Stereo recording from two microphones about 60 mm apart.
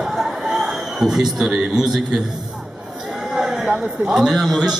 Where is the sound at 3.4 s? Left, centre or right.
Centre.